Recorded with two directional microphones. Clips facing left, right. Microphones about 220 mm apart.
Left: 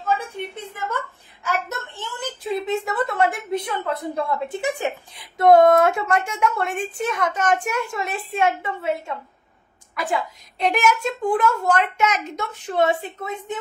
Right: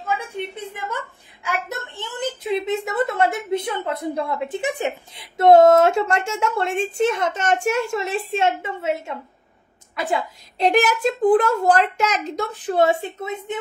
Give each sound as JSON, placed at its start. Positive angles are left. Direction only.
{"t": 1.4, "sound": "a woman's voice", "side_deg": -15}
{"t": 9.9, "sound": "a child's voice", "side_deg": -25}